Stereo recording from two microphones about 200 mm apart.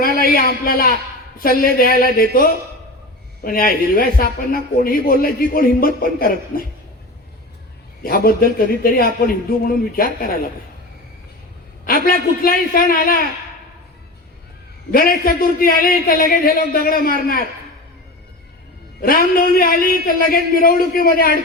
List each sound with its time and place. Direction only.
0.0 s a man's voice: 45° left (ahead or behind)
8.0 s a man's voice: 50° left (ahead or behind)
11.9 s a man's voice: 45° left (ahead or behind)
14.9 s a man's voice: 45° left (ahead or behind)
19.0 s a man's voice: 45° left (ahead or behind)